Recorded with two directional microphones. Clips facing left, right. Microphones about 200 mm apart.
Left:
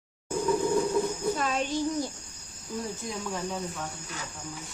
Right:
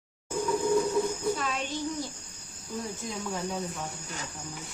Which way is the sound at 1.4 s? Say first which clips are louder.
Left 4 dB; 45° left (ahead or behind).